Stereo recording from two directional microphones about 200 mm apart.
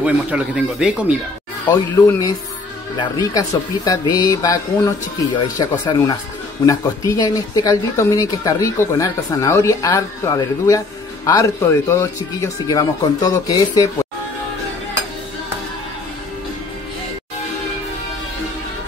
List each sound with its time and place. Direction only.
0.0 s speech: 5° right (ahead or behind)
1.7 s speech: 20° left (ahead or behind)
3.3 s speech: 15° left (ahead or behind)